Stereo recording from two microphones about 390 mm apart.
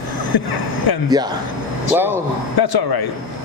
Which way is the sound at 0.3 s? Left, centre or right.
Left.